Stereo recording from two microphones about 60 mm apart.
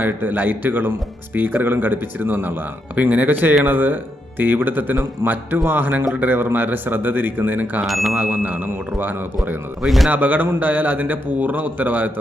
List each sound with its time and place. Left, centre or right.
0.0 s speech: right
7.9 s a man's voice: centre
8.1 s speech: right
9.8 s a man's voice: centre
10.1 s a man's voice: right